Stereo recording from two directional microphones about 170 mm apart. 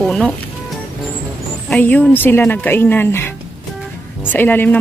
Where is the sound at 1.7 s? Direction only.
10° left (ahead or behind).